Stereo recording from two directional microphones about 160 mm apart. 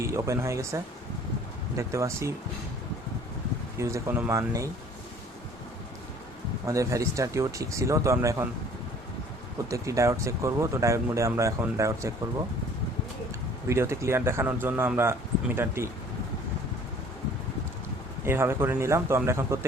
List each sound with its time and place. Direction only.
0.0 s speech: 20° right (ahead or behind)
3.8 s speech: 20° right (ahead or behind)
6.7 s speech: 20° right (ahead or behind)
9.6 s speech: 20° right (ahead or behind)
13.7 s speech: 15° right (ahead or behind)
18.3 s speech: 15° right (ahead or behind)